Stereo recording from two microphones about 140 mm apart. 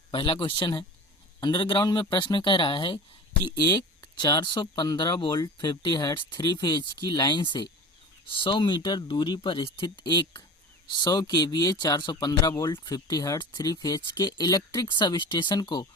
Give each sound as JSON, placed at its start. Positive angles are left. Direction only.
{"t": 0.1, "sound": "speech", "side_deg": 35}
{"t": 4.2, "sound": "speech", "side_deg": 30}